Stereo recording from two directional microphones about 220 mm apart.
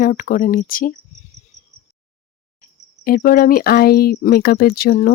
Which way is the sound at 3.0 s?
40° left (ahead or behind).